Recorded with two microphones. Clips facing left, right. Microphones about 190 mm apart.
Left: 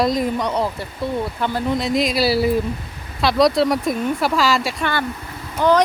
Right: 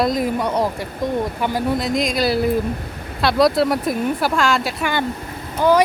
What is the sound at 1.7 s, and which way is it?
A woman's voice, centre (ahead or behind).